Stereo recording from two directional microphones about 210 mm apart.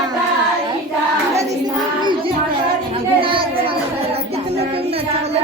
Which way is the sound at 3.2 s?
25° right (ahead or behind).